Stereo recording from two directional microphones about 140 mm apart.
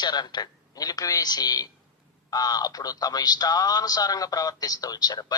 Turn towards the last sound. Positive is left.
turn(degrees=30)  # may be behind; listen again after turning